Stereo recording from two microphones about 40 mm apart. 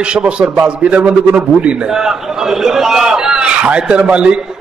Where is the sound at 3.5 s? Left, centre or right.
Right.